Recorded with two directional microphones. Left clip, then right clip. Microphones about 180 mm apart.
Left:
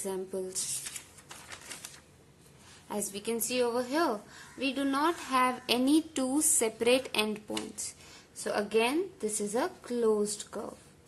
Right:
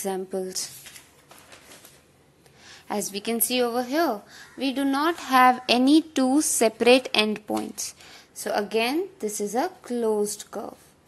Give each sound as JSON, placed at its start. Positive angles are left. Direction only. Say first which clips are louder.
{"t": 0.0, "sound": "a woman's voice", "louder": "right 7 dB", "side_deg": -30}
{"t": 2.6, "sound": "a woman's voice", "louder": "right 7 dB", "side_deg": -30}